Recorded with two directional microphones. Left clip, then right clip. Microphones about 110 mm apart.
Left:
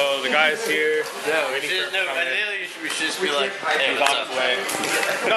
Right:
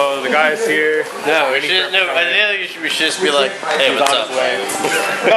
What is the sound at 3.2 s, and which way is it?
Speech, 30° right (ahead or behind).